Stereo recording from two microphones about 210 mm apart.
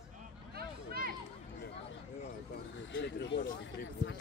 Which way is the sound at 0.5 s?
45° right (ahead or behind).